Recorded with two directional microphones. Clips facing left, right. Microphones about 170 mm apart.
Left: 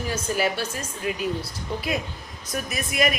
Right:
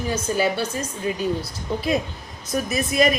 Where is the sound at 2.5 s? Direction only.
35° right (ahead or behind).